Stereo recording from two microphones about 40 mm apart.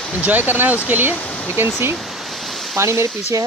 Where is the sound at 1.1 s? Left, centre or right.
Left.